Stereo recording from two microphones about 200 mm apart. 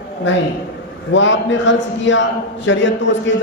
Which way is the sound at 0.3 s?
65° left (ahead or behind).